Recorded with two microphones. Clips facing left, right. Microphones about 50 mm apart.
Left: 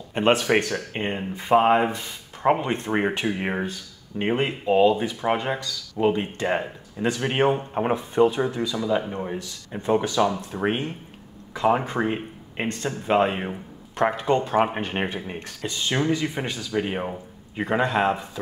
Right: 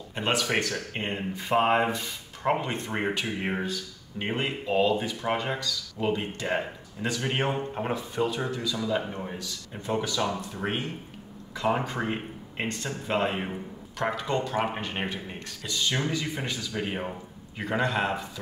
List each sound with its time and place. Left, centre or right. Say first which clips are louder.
0.1 s speech: left 7 dB; left
1.6 s speech: left 3 dB; centre
2.6 s speech: left 6 dB; left
10.0 s speech: left 6 dB; left